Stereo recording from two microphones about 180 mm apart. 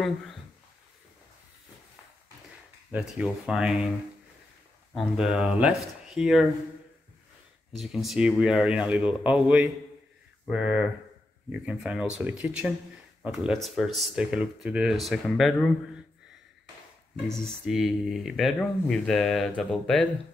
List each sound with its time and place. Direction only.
2.9 s speech: 5° right (ahead or behind)
4.9 s speech: centre (ahead or behind)
7.7 s speech: centre (ahead or behind)
17.3 s speech: centre (ahead or behind)